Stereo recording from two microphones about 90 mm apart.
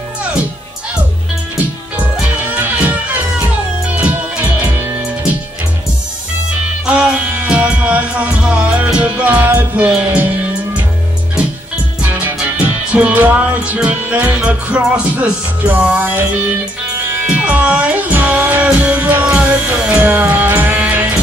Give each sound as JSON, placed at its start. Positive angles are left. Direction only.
{"t": 2.0, "sound": "music", "side_deg": -15}
{"t": 6.9, "sound": "music", "side_deg": -10}
{"t": 12.9, "sound": "music", "side_deg": -15}
{"t": 17.3, "sound": "music", "side_deg": -15}